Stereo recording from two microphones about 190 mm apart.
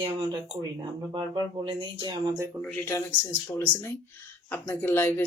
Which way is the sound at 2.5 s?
5° left (ahead or behind).